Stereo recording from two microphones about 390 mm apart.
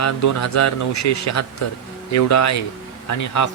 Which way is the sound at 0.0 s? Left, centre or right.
Left.